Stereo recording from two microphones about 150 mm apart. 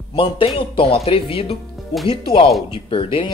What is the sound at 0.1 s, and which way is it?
A woman's voice, 35° left (ahead or behind).